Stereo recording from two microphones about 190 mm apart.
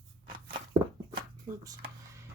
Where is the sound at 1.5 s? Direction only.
15° right (ahead or behind).